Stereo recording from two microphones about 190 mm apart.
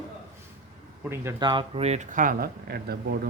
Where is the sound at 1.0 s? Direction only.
15° right (ahead or behind).